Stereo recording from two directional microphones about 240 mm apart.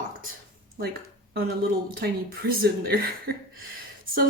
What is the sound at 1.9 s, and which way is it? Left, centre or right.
Speech, right.